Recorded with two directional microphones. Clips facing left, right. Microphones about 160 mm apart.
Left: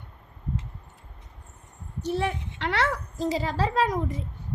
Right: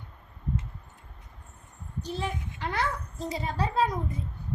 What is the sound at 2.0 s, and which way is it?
A woman's voice, 70° left (ahead or behind).